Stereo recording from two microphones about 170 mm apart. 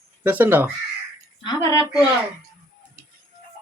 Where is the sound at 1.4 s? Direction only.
20° left (ahead or behind).